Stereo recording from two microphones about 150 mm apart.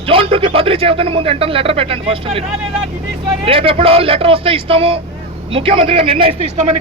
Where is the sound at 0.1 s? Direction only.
35° right (ahead or behind).